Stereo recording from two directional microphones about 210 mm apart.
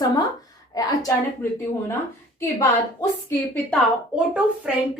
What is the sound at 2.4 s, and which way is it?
A woman's voice, 15° left (ahead or behind).